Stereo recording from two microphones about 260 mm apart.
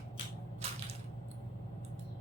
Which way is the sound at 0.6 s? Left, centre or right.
Right.